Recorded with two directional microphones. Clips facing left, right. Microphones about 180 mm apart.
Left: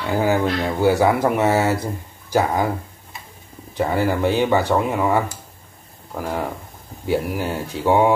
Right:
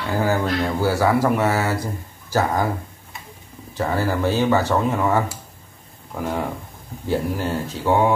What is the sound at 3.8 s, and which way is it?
Speech, 15° left (ahead or behind).